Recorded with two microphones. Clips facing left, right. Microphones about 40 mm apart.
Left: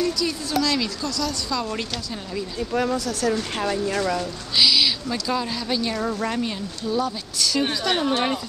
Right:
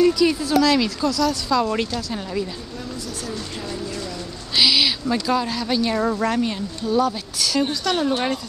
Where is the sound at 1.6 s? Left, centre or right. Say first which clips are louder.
Right 6 dB; centre.